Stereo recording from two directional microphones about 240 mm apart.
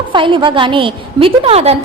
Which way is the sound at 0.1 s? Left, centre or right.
Centre.